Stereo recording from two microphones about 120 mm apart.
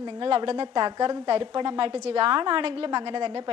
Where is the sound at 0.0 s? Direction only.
45° right (ahead or behind).